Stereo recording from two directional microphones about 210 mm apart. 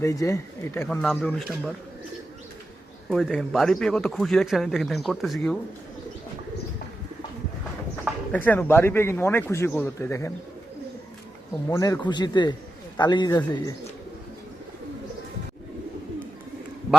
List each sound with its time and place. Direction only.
0.0 s speech: 15° left (ahead or behind)
1.0 s speech: centre (ahead or behind)
3.1 s speech: centre (ahead or behind)
8.0 s speech: 5° left (ahead or behind)
11.7 s speech: 15° left (ahead or behind)